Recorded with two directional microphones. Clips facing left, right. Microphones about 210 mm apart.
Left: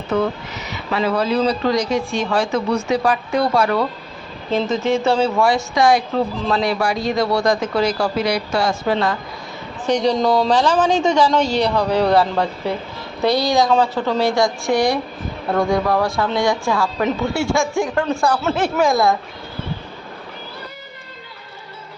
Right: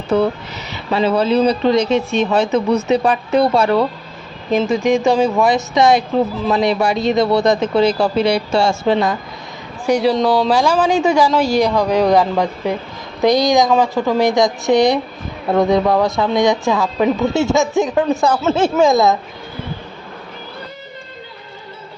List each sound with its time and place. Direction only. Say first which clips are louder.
0.1 s speech: right 4 dB; 30° right (ahead or behind)
4.5 s a man's voice: right 4 dB; 10° right (ahead or behind)
9.8 s a man's voice: right 2 dB; 5° right (ahead or behind)